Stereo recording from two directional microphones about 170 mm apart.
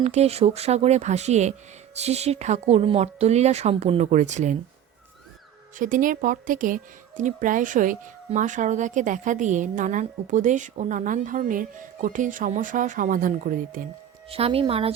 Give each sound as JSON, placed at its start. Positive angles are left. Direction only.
{"t": 0.0, "sound": "speech", "side_deg": -40}
{"t": 5.7, "sound": "a woman's voice", "side_deg": -50}
{"t": 14.3, "sound": "speech", "side_deg": -35}